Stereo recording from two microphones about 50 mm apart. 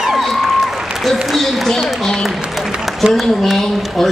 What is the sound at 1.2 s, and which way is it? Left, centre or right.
A man's voice, centre.